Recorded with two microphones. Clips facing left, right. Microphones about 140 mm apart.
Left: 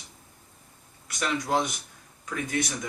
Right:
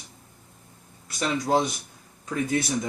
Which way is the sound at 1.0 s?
30° right (ahead or behind).